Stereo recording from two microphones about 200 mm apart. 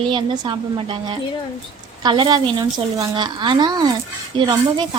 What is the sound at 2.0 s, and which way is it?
A woman's voice, 20° right (ahead or behind).